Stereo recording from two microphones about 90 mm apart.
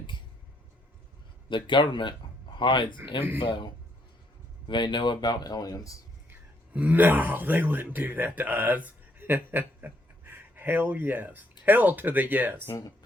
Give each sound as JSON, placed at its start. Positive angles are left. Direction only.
{"t": 1.5, "sound": "a man's voice", "side_deg": 65}
{"t": 4.7, "sound": "speech", "side_deg": 60}
{"t": 6.7, "sound": "speech", "side_deg": -20}